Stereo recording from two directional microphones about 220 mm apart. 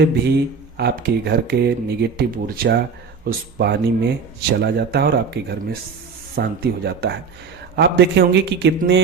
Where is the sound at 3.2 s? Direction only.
45° right (ahead or behind).